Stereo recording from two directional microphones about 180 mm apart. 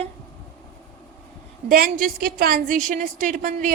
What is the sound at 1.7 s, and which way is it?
A woman's voice, 50° right (ahead or behind).